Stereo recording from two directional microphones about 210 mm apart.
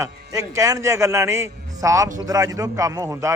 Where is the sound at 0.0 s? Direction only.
15° right (ahead or behind).